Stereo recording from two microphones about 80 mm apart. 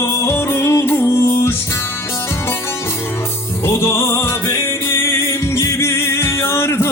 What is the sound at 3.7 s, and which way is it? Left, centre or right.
Music, left.